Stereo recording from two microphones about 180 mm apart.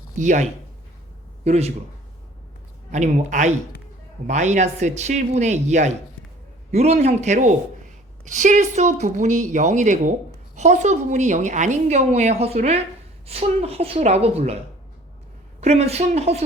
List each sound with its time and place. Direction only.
0.2 s speech: 40° right (ahead or behind)
1.5 s speech: 35° right (ahead or behind)
2.9 s speech: 40° right (ahead or behind)
15.6 s speech: 35° right (ahead or behind)